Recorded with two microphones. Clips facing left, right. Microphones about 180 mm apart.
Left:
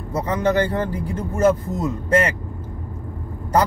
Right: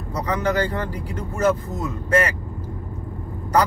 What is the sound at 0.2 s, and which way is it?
Speech, 25° left (ahead or behind).